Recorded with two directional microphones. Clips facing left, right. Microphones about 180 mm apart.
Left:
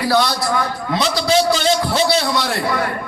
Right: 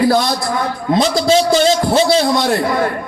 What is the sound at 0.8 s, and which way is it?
A man's voice, 45° right (ahead or behind).